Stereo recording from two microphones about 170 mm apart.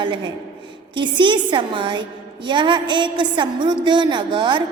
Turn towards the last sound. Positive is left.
turn(degrees=-30)  # may be behind; listen again after turning